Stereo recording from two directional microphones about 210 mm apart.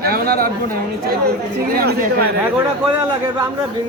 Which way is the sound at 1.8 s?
50° right (ahead or behind).